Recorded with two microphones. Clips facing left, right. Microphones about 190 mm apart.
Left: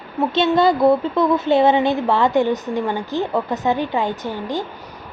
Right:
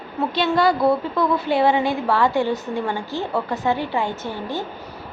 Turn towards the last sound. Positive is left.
turn(degrees=15)  # may be behind; listen again after turning